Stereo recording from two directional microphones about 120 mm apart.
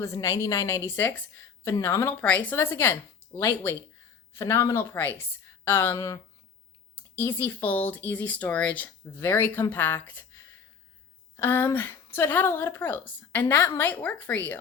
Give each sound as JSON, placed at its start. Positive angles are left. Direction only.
{"t": 0.0, "sound": "a woman's voice", "side_deg": 25}